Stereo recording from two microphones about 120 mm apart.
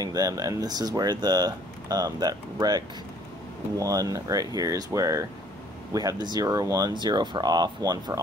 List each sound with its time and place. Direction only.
0.0 s speech: 30° right (ahead or behind)